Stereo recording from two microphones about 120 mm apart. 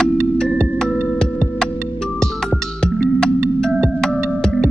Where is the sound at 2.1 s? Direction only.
5° left (ahead or behind).